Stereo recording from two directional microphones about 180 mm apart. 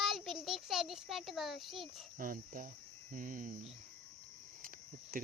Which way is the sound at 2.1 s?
50° right (ahead or behind).